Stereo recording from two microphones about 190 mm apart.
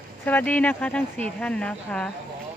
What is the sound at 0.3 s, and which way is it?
Speech, 10° left (ahead or behind).